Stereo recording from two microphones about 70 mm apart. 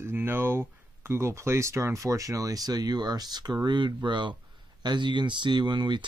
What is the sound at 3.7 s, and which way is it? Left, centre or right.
Speech, right.